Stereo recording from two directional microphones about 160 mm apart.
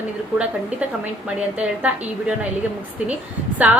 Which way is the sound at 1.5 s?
5° right (ahead or behind).